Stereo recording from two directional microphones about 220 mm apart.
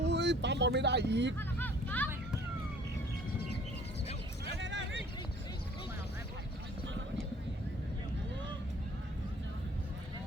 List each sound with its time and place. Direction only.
0.0 s speech: 50° right (ahead or behind)
1.4 s vehicle: 10° left (ahead or behind)
4.6 s a sound: 55° right (ahead or behind)